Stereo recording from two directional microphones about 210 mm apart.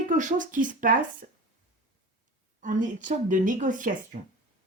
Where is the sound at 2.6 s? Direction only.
40° right (ahead or behind).